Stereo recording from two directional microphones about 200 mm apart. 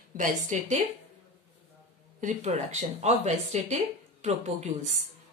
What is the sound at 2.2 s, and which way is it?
Speech, 35° right (ahead or behind).